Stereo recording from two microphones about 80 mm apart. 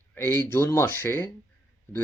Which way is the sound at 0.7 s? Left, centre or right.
Left.